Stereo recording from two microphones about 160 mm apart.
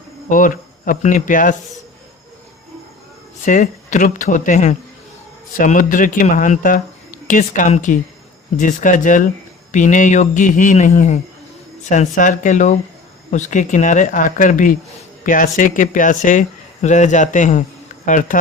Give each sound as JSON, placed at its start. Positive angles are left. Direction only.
{"t": 0.3, "sound": "speech", "side_deg": 55}
{"t": 3.4, "sound": "speech", "side_deg": 50}